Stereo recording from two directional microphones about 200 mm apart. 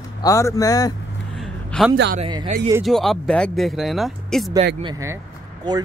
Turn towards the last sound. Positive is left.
turn(degrees=-15)  # may be behind; listen again after turning